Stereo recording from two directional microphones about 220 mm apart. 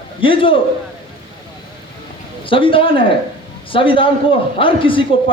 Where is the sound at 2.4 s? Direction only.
25° left (ahead or behind).